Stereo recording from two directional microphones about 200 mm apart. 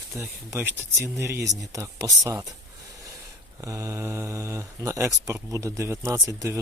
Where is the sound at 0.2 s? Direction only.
15° right (ahead or behind).